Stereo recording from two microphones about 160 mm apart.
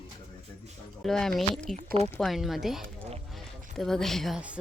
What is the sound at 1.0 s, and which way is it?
A woman's voice, 5° left (ahead or behind).